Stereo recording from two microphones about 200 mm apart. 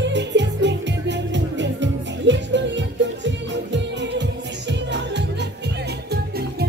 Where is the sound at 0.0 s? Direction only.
60° right (ahead or behind).